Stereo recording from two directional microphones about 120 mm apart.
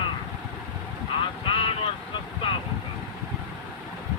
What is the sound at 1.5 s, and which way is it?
Vehicle, 50° left (ahead or behind).